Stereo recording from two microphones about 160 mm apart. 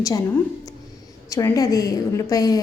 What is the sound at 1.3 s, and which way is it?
A woman's voice, 20° left (ahead or behind).